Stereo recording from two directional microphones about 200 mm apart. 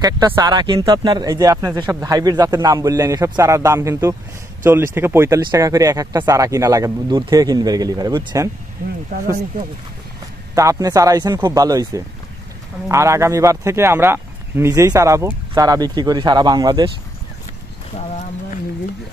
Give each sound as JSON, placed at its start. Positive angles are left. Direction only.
{"t": 0.0, "sound": "speech", "side_deg": -20}
{"t": 10.5, "sound": "speech", "side_deg": -15}